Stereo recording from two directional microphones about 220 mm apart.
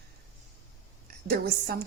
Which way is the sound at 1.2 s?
45° right (ahead or behind).